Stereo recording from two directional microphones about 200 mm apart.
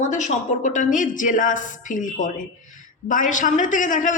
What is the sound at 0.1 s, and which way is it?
A woman's voice, 40° left (ahead or behind).